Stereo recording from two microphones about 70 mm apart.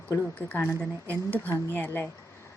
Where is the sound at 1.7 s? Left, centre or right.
Left.